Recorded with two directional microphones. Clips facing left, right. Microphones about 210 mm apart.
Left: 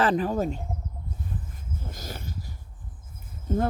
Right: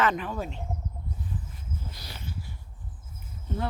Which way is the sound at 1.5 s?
45° left (ahead or behind).